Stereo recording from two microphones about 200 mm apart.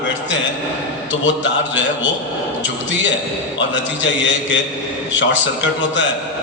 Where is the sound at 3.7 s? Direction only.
65° left (ahead or behind).